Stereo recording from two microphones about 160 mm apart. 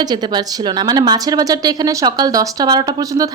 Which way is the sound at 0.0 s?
25° right (ahead or behind).